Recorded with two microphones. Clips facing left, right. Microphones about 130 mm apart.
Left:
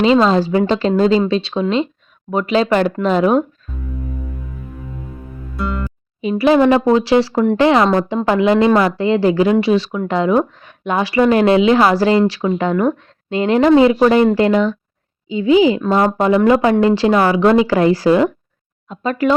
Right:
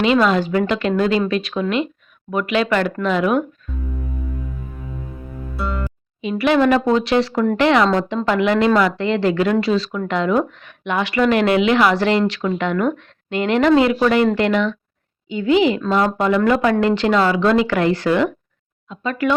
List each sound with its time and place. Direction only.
0.0 s a woman's voice: 30° left (ahead or behind)
5.5 s music: centre (ahead or behind)
6.2 s a woman's voice: 30° left (ahead or behind)